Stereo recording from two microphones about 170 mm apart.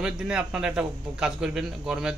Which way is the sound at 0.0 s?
5° right (ahead or behind).